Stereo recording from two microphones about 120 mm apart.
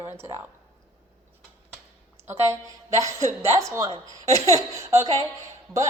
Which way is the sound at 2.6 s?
25° right (ahead or behind).